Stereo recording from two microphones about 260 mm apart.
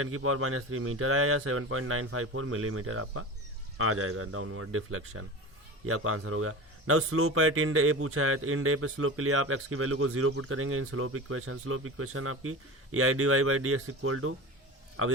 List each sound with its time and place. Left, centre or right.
0.0 s a man's voice: right